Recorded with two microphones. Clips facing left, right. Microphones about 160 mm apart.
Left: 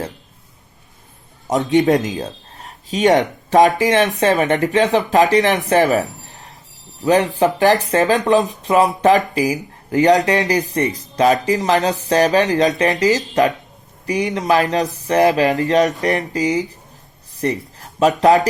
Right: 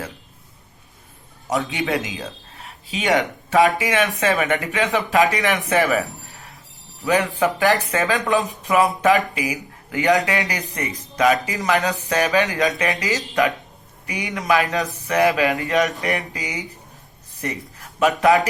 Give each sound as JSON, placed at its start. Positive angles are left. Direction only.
{"t": 1.5, "sound": "speech", "side_deg": 40}
{"t": 17.4, "sound": "a sound", "side_deg": 35}
{"t": 18.2, "sound": "speech", "side_deg": 40}